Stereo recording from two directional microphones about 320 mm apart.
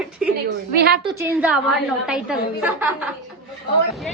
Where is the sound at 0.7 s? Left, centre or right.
Right.